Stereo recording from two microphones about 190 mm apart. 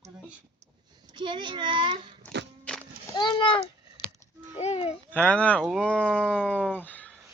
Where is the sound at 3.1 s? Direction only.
25° left (ahead or behind).